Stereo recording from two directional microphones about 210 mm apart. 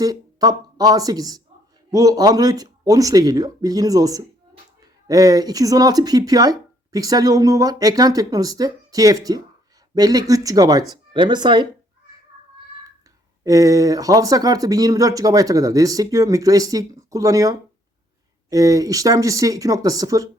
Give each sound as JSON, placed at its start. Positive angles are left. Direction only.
{"t": 0.0, "sound": "speech", "side_deg": -15}
{"t": 13.4, "sound": "speech", "side_deg": -15}